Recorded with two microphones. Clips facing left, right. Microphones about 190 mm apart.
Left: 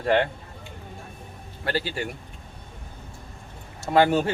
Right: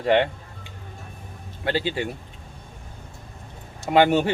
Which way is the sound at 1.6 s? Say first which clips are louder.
Right 3 dB; 20° right (ahead or behind).